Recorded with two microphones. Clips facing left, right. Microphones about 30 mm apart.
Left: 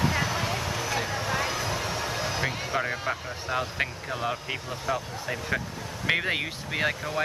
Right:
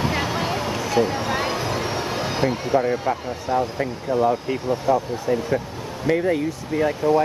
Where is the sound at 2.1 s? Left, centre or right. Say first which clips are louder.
Right 5 dB; right.